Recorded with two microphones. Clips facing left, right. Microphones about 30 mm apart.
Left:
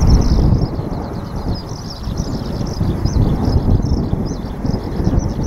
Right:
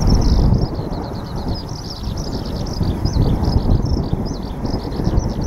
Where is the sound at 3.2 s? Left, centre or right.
Right.